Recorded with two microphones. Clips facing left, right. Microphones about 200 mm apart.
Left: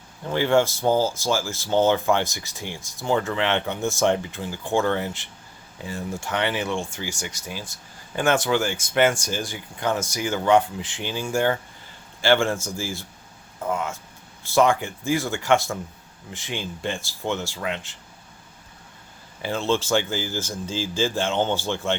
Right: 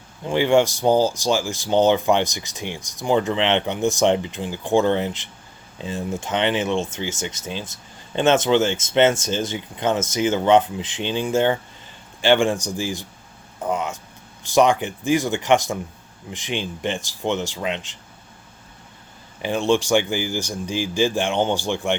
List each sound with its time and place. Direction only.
0.3 s speech: 15° right (ahead or behind)
19.4 s speech: 15° right (ahead or behind)